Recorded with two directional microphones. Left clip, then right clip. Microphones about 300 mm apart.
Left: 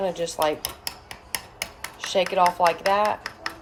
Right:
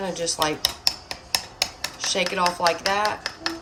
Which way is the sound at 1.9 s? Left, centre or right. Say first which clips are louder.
Left 3 dB; centre.